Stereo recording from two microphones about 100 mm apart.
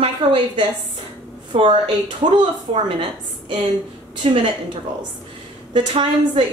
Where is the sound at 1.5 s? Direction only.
85° right.